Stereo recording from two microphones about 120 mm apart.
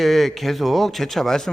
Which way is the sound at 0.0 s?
Centre (ahead or behind).